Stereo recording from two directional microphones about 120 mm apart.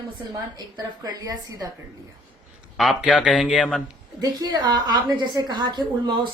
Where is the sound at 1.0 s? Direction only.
30° right (ahead or behind).